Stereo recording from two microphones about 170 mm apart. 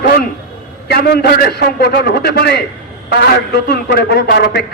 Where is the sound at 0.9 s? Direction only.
70° left (ahead or behind).